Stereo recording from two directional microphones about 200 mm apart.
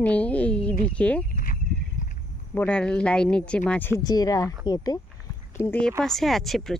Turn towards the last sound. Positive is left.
turn(degrees=0)  # may be behind; listen again after turning